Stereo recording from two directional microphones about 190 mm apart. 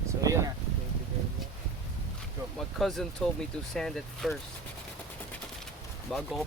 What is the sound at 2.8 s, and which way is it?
Speech, centre (ahead or behind).